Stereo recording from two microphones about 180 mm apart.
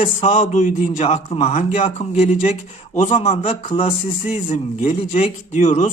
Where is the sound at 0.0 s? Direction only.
40° left (ahead or behind).